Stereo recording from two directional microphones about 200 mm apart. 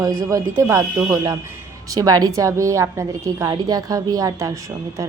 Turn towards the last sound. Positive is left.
turn(degrees=-15)  # may be behind; listen again after turning